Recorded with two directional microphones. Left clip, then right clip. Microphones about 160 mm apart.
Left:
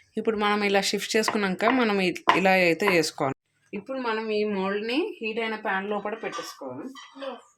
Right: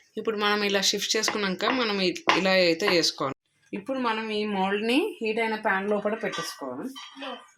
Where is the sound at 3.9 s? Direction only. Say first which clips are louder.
Even; 35° right (ahead or behind).